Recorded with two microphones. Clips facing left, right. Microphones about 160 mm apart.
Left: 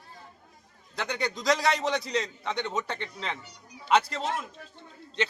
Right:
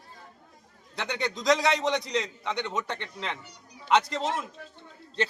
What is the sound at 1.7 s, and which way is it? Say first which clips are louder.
A man's voice: right 1 dB; 20° right (ahead or behind).